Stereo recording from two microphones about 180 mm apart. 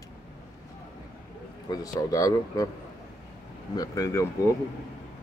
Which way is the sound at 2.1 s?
20° left (ahead or behind).